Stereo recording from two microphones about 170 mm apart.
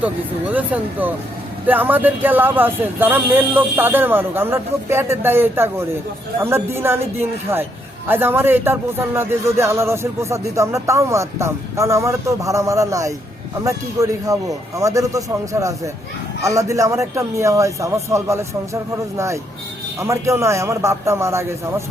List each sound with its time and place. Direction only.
0.0 s a man's voice: 10° right (ahead or behind)